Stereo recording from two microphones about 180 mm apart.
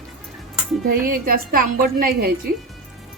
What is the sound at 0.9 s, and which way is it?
A woman's voice, 55° right (ahead or behind).